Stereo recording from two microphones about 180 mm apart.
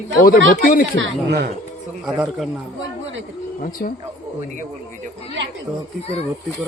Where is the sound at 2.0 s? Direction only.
Centre (ahead or behind).